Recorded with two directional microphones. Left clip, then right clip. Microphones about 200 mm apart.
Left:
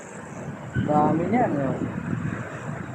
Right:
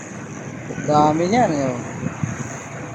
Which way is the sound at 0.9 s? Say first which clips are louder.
Right 6 dB; 50° right (ahead or behind).